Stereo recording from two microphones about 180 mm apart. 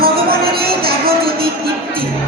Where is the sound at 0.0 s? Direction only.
55° right (ahead or behind).